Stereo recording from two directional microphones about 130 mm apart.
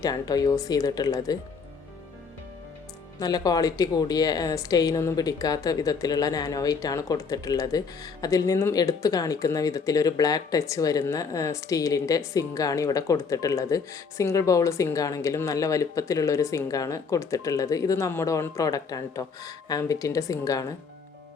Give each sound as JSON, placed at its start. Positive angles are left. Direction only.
{"t": 0.0, "sound": "a woman's voice", "side_deg": 30}
{"t": 3.2, "sound": "a woman's voice", "side_deg": 30}